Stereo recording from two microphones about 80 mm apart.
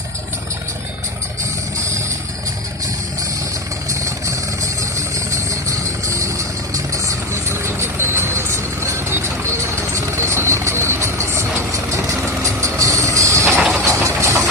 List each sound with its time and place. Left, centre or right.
3.8 s vehicle: right